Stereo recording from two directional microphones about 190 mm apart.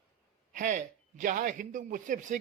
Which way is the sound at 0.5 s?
40° right (ahead or behind).